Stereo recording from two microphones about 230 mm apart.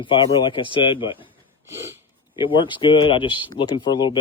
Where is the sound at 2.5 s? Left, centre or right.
Left.